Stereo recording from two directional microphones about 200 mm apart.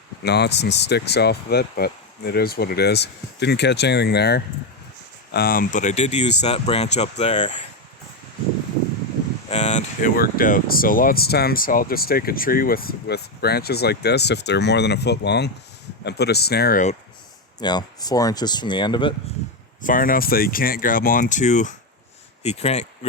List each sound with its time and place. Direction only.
0.3 s speech: 55° left (ahead or behind); by 7.6 s 35° left (ahead or behind)
9.5 s speech: 35° left (ahead or behind)
17.6 s speech: 20° left (ahead or behind)
19.8 s speech: 45° left (ahead or behind)